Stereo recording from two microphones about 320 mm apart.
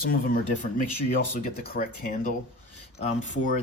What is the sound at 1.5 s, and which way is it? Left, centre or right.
Speech, left.